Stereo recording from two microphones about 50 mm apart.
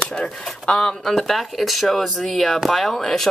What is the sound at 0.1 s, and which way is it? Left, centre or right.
Speech, centre.